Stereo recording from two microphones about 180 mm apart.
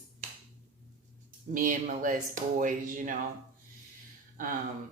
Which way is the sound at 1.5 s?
50° right (ahead or behind).